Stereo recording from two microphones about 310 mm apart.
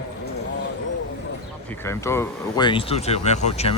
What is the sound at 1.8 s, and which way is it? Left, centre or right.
Speech, centre.